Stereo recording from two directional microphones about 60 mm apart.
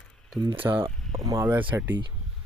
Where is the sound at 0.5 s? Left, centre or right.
Right.